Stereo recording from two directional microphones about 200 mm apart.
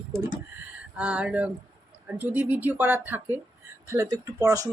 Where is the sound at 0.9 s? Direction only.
5° right (ahead or behind).